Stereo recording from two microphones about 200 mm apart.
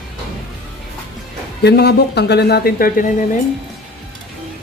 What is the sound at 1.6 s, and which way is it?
Speech, 55° left (ahead or behind).